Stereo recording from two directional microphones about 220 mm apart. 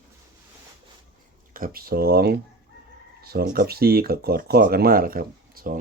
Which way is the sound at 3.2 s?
45° right (ahead or behind).